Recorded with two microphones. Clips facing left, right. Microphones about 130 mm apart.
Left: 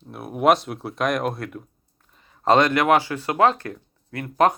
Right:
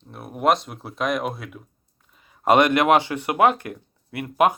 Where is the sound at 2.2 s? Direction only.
15° right (ahead or behind).